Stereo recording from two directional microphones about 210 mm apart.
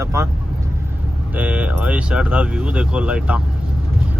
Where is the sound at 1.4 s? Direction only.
5° right (ahead or behind).